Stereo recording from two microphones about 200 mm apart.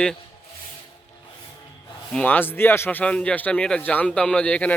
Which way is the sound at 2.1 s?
10° left (ahead or behind).